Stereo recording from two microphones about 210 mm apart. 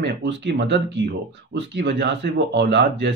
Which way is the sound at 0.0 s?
55° right (ahead or behind).